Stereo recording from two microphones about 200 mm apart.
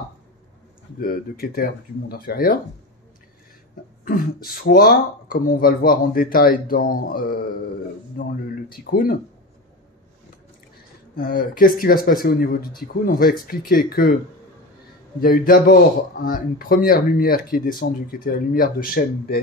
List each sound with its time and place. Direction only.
1.0 s speech: 45° left (ahead or behind)
4.0 s speech: 45° left (ahead or behind)
11.1 s speech: 45° left (ahead or behind)
15.1 s speech: 45° left (ahead or behind)